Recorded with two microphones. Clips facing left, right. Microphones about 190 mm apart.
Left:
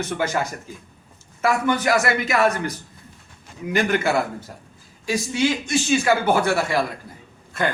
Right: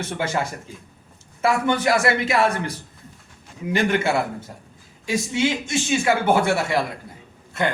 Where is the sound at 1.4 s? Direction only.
30° right (ahead or behind).